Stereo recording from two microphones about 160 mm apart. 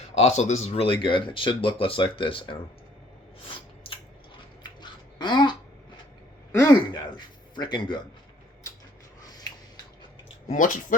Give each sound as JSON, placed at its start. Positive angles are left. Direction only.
{"t": 0.2, "sound": "speech", "side_deg": 45}
{"t": 3.9, "sound": "squish", "side_deg": 35}
{"t": 4.6, "sound": "babbling", "side_deg": 25}
{"t": 6.7, "sound": "speech", "side_deg": 25}
{"t": 10.5, "sound": "speech", "side_deg": 55}